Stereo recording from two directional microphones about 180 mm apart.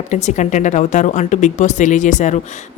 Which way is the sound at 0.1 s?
40° left (ahead or behind).